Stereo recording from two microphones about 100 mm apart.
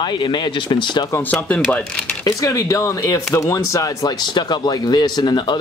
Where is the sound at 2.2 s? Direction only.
35° left (ahead or behind).